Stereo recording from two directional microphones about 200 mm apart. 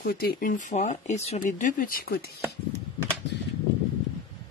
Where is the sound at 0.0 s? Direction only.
50° left (ahead or behind).